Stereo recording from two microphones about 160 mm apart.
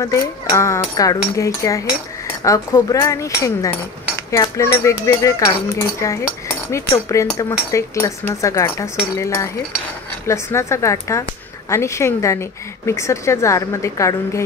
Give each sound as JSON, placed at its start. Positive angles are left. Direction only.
{"t": 0.0, "sound": "cutlery", "side_deg": 20}
{"t": 7.2, "sound": "a woman's voice", "side_deg": 20}
{"t": 7.7, "sound": "cutlery", "side_deg": 15}
{"t": 10.2, "sound": "a woman's voice", "side_deg": 15}